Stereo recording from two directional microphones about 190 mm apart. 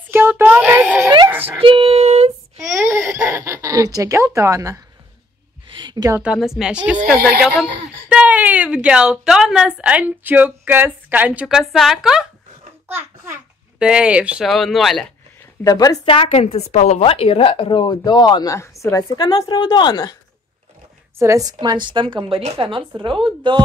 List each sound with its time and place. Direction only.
0.1 s a child's voice: 10° right (ahead or behind)
1.4 s female singing: 30° right (ahead or behind)
2.6 s speech: 15° right (ahead or behind)
8.1 s a woman's voice: 5° right (ahead or behind)
15.6 s a woman's voice: 20° left (ahead or behind)
21.2 s a woman's voice: 15° right (ahead or behind)